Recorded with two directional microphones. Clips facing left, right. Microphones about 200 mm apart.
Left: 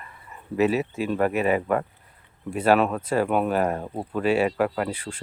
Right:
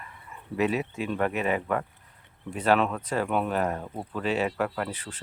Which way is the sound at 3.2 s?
45° left (ahead or behind).